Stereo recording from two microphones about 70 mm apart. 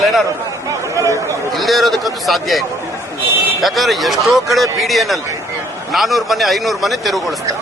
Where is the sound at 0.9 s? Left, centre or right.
Right.